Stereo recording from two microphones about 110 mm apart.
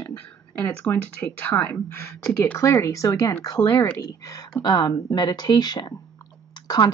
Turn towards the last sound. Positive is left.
turn(degrees=40)  # may be behind; listen again after turning